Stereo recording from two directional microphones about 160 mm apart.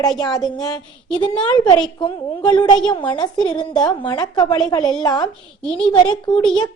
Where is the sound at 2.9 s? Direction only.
30° left (ahead or behind).